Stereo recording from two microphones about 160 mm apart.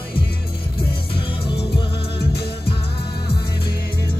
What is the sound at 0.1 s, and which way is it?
Music, 35° left (ahead or behind).